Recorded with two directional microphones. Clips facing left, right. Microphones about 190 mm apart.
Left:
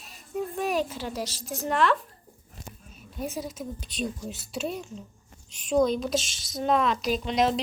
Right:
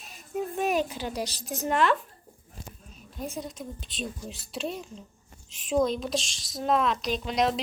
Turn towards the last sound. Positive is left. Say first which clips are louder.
# left 2 dB
turn(degrees=0)  # may be behind; listen again after turning